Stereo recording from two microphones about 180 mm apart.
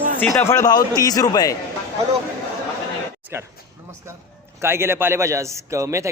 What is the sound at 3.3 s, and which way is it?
Speech, 15° right (ahead or behind).